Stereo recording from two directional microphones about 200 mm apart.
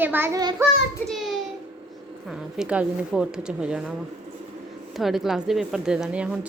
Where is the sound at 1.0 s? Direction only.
Centre (ahead or behind).